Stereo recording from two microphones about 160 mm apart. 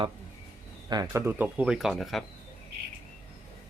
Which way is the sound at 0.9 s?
20° right (ahead or behind).